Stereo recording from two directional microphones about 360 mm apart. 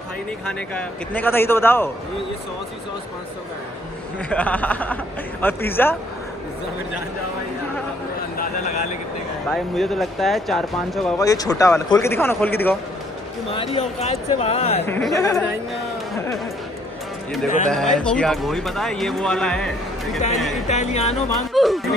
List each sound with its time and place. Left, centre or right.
0.7 s speech: centre
4.3 s speech: centre
9.5 s speech: centre
14.9 s speech: centre
17.6 s speech: centre
20.6 s music: centre
21.5 s speech: centre